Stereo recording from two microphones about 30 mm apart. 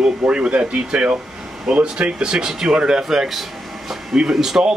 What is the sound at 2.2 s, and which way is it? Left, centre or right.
Speech, right.